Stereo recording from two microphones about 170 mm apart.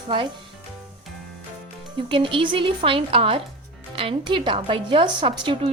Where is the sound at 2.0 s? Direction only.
30° right (ahead or behind).